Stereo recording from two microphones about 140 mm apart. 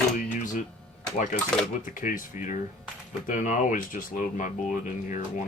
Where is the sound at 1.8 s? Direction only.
70° left (ahead or behind).